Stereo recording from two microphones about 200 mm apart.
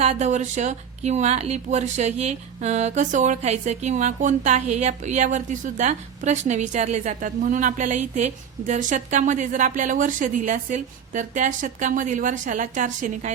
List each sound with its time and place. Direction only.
0.0 s speech: 35° right (ahead or behind)